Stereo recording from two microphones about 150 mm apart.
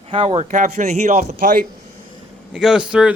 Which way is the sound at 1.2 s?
70° right (ahead or behind).